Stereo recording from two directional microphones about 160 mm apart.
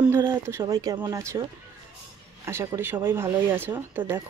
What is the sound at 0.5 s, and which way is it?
Speech, 20° right (ahead or behind).